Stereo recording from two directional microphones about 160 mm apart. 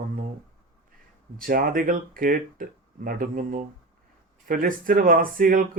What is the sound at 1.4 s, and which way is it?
Speech, 65° right (ahead or behind).